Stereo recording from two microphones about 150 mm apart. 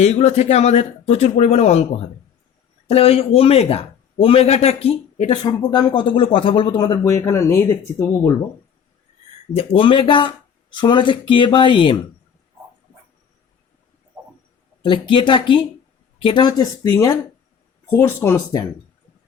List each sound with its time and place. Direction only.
0.0 s a man's voice: 45° left (ahead or behind)
5.4 s speech: 25° left (ahead or behind)
9.5 s a man's voice: 40° left (ahead or behind)
14.8 s a man's voice: 35° left (ahead or behind); by 18.4 s 15° left (ahead or behind)